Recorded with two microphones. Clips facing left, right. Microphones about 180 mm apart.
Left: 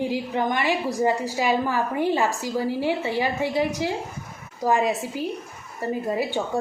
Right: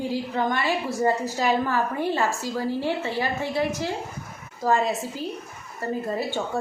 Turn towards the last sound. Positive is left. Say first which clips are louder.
# left 2 dB
turn(degrees=15)  # may be behind; listen again after turning